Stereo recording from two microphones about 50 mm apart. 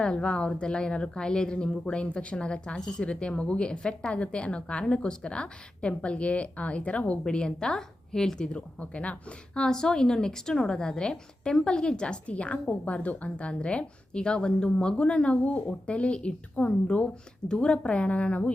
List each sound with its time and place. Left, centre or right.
0.0 s a woman's voice: centre
8.8 s a woman's voice: left
9.6 s a woman's voice: centre